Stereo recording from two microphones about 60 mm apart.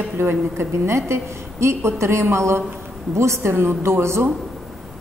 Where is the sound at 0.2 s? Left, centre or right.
Right.